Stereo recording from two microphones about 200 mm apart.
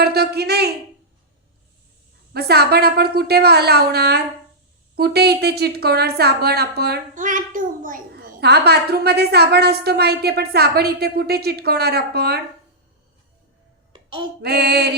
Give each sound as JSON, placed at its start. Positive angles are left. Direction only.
{"t": 0.0, "sound": "a woman's voice", "side_deg": -55}
{"t": 2.3, "sound": "a woman's voice", "side_deg": -55}
{"t": 14.4, "sound": "a woman's voice", "side_deg": -55}